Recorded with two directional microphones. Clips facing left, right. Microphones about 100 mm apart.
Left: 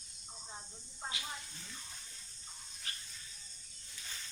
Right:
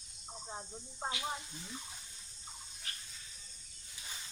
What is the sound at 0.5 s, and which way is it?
Speech, 30° right (ahead or behind).